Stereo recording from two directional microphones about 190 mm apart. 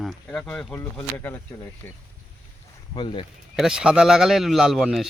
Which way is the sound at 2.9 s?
25° left (ahead or behind).